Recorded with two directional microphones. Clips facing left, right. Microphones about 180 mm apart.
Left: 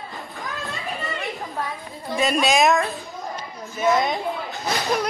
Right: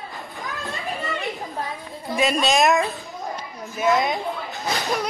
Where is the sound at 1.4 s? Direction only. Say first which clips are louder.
Left 1 dB; 20° right (ahead or behind).